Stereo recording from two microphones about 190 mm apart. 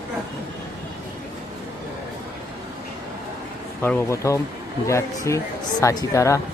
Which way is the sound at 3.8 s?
10° left (ahead or behind).